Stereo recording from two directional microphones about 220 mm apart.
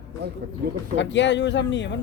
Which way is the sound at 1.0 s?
55° left (ahead or behind).